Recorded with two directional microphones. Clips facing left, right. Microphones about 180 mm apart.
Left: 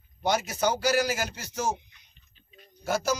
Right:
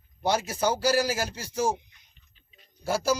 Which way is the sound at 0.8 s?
30° right (ahead or behind).